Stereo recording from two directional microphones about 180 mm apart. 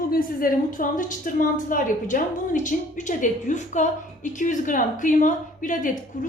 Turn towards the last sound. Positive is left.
turn(degrees=45)  # may be behind; listen again after turning